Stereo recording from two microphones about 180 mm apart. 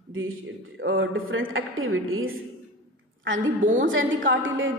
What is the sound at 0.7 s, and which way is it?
A woman's voice, 90° right.